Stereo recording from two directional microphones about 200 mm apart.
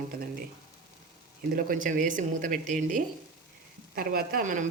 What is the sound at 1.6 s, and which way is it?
A woman's voice, 45° right (ahead or behind).